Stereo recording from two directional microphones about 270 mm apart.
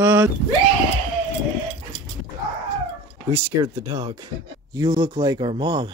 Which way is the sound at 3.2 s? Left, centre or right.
Centre.